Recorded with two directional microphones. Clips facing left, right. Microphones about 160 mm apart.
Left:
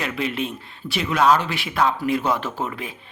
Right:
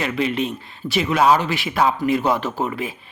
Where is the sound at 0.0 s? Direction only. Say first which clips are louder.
Right 4 dB; centre (ahead or behind).